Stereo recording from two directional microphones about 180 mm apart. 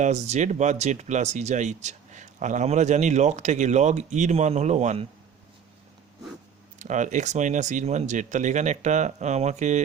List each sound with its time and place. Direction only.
0.0 s speech: 40° right (ahead or behind)
6.7 s speech: 45° right (ahead or behind)